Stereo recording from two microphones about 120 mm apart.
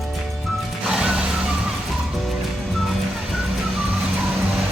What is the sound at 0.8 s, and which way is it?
Music, 5° right (ahead or behind).